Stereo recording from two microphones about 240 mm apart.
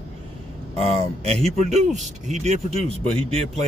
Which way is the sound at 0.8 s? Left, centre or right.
Right.